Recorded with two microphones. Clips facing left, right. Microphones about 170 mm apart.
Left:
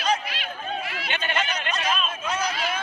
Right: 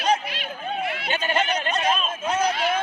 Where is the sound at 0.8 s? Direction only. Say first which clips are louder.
Right 5 dB; 55° right (ahead or behind).